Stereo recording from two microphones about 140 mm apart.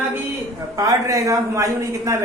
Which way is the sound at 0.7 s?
25° right (ahead or behind).